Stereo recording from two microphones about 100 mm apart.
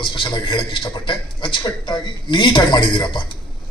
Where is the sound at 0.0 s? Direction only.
55° left (ahead or behind).